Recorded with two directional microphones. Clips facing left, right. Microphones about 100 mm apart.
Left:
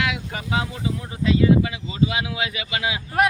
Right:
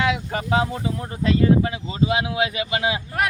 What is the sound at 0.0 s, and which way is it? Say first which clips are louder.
Speech: right 4 dB; 30° right (ahead or behind).